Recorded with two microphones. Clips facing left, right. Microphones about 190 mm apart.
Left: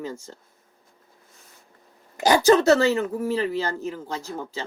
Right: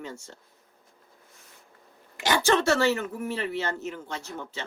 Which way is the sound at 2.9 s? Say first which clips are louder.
Left 7 dB; 35° left (ahead or behind).